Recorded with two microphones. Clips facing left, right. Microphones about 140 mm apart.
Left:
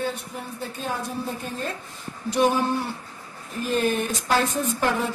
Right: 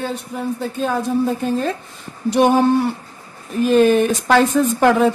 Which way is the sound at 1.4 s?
90° right.